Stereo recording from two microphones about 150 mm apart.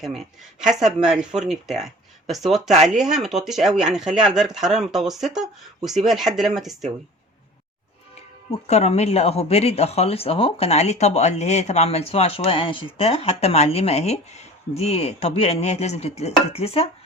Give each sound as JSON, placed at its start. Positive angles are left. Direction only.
{"t": 0.0, "sound": "speech", "side_deg": 0}
{"t": 8.6, "sound": "speech", "side_deg": 45}